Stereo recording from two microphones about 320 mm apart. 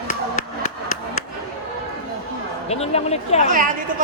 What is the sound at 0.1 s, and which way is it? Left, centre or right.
Chop, left.